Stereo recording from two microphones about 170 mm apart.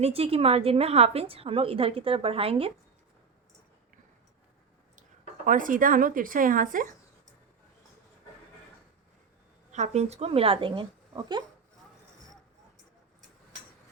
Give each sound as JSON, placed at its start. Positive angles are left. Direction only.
{"t": 0.0, "sound": "a woman's voice", "side_deg": -35}
{"t": 5.5, "sound": "speech", "side_deg": -50}
{"t": 9.7, "sound": "a woman's voice", "side_deg": -40}